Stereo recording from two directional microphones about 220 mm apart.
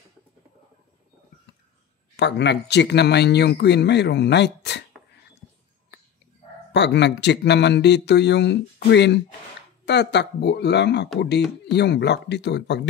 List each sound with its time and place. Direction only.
2.1 s speech: 50° left (ahead or behind)
6.7 s speech: 50° left (ahead or behind)